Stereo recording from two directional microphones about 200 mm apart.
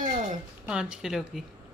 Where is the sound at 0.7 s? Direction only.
5° right (ahead or behind).